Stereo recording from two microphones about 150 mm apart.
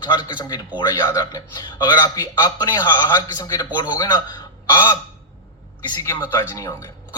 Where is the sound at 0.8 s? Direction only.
25° left (ahead or behind).